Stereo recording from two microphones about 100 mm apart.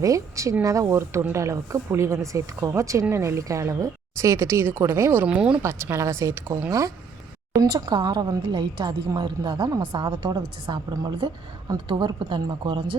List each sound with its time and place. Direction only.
0.0 s a woman's voice: 35° right (ahead or behind)
5.2 s speech: 15° right (ahead or behind)
5.6 s a woman's voice: 25° right (ahead or behind); by 13.0 s 55° right (ahead or behind)